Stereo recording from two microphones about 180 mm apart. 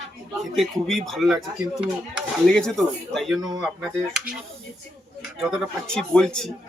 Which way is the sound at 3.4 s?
20° right (ahead or behind).